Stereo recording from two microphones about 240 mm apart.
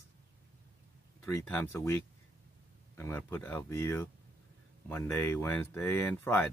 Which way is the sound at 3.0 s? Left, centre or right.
Centre.